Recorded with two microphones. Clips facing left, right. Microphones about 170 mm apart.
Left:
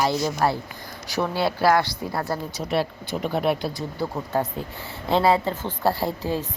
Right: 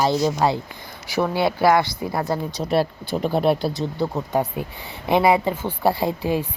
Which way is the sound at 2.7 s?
40° right (ahead or behind).